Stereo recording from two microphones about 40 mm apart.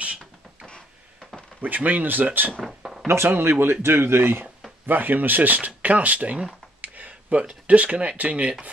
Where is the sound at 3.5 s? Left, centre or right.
Right.